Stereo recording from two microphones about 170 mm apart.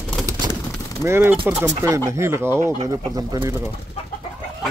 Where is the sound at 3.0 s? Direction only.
25° right (ahead or behind).